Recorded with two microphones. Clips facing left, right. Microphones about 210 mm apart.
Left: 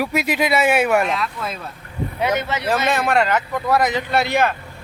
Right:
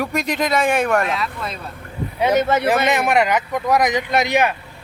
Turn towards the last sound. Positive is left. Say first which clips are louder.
# right 1 dB
turn(degrees=-15)  # may be behind; listen again after turning